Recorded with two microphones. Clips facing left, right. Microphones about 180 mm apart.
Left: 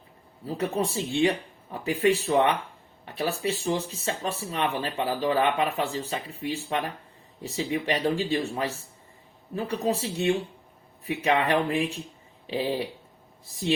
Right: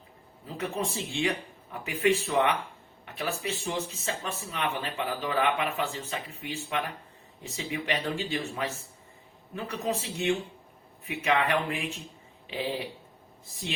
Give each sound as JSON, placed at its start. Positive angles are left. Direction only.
{"t": 0.4, "sound": "speech", "side_deg": 35}